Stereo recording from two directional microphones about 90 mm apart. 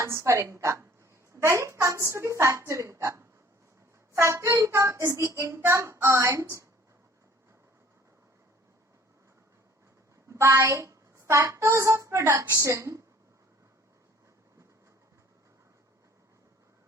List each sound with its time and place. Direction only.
0.0 s child singing: 30° right (ahead or behind)
10.2 s speech: 35° right (ahead or behind)
12.5 s child singing: 35° right (ahead or behind)